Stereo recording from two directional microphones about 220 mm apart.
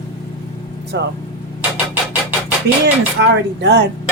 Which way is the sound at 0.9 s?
55° right (ahead or behind).